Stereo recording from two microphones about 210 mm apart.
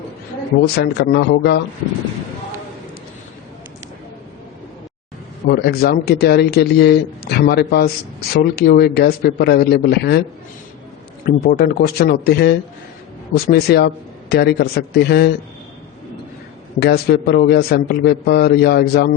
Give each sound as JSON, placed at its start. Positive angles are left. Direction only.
{"t": 0.8, "sound": "speech", "side_deg": 50}
{"t": 5.5, "sound": "speech", "side_deg": 50}
{"t": 11.3, "sound": "speech", "side_deg": 45}
{"t": 16.8, "sound": "speech", "side_deg": 50}